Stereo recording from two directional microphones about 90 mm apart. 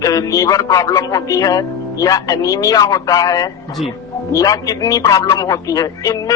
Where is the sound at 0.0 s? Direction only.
40° left (ahead or behind).